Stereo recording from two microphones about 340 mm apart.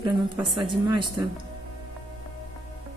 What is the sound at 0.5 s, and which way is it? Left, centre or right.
Speech, centre.